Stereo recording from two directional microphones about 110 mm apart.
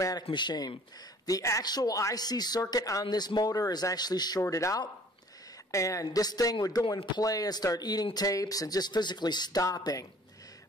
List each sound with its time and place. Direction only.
0.3 s a man's voice: 45° left (ahead or behind)
1.2 s speech: 30° left (ahead or behind)